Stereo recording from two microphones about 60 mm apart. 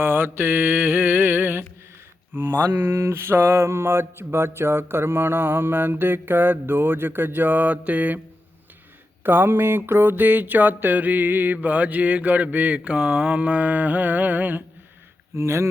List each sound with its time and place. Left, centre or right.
0.0 s mantra: right
9.2 s a sound: right
15.4 s speech: right